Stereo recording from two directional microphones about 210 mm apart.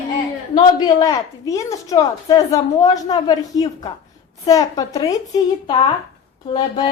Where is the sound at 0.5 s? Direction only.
20° left (ahead or behind).